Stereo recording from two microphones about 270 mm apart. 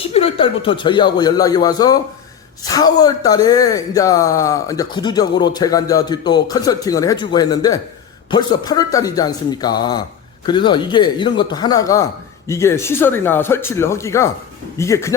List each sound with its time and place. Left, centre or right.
0.0 s speech: left